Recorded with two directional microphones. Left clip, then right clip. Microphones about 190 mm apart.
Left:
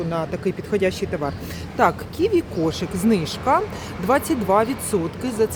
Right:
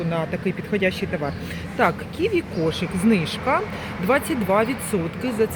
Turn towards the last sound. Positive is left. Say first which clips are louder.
# left 1 dB
turn(degrees=20)  # may be behind; listen again after turning